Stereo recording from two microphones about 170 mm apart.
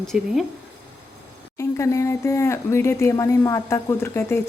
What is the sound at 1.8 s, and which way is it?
Speech, 20° left (ahead or behind).